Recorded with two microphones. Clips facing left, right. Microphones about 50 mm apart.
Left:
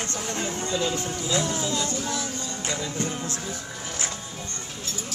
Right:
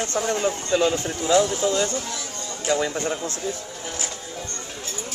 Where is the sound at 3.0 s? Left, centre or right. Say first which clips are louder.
Right 3 dB; right.